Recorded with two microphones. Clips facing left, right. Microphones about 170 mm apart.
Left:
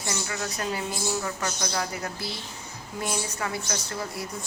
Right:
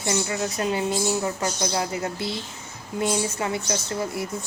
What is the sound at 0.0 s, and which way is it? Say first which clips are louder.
A woman's voice: right 6 dB; 25° right (ahead or behind).